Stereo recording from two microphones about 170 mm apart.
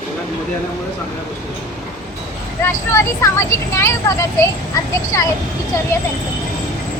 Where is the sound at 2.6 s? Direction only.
15° left (ahead or behind).